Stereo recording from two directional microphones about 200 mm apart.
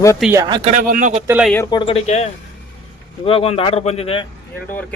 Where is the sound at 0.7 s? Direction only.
40° right (ahead or behind).